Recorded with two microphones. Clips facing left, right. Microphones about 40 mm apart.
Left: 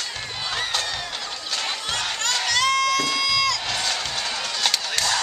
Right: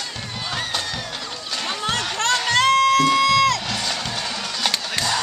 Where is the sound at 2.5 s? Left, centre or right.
Right.